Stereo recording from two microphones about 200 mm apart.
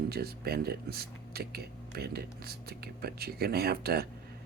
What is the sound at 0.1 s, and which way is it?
Speech, 50° right (ahead or behind).